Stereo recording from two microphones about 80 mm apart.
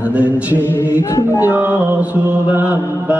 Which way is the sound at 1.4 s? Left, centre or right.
Right.